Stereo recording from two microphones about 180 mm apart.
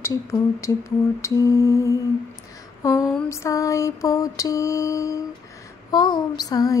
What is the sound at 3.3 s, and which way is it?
Mantra, 15° left (ahead or behind).